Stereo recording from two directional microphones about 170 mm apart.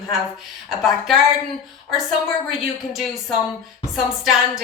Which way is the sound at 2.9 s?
Centre (ahead or behind).